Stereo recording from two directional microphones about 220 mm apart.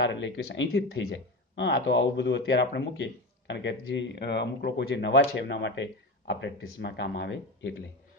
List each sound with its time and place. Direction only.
0.0 s speech: 55° left (ahead or behind)